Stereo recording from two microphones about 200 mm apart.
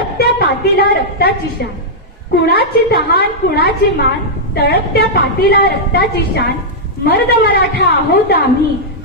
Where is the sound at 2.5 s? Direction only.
50° left (ahead or behind).